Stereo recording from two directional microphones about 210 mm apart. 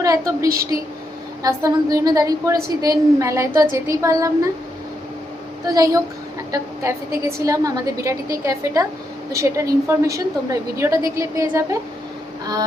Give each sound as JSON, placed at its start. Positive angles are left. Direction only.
{"t": 0.0, "sound": "a woman's voice", "side_deg": -15}
{"t": 5.7, "sound": "a woman's voice", "side_deg": -15}